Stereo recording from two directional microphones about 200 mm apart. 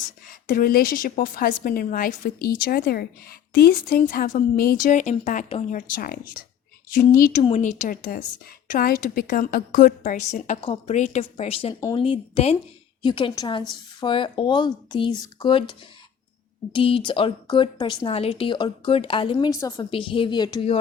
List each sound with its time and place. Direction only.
0.3 s a woman's voice: 45° left (ahead or behind)
5.9 s a woman's voice: 45° left (ahead or behind)
7.4 s a woman's voice: 35° left (ahead or behind)
11.7 s speech: 15° left (ahead or behind)
11.9 s speech: 25° left (ahead or behind)
16.7 s speech: 25° left (ahead or behind)